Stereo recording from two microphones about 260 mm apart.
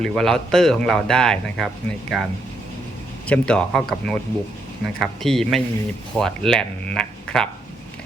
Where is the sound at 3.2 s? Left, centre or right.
Centre.